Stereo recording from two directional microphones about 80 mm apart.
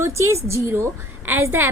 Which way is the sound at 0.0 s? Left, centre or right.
Right.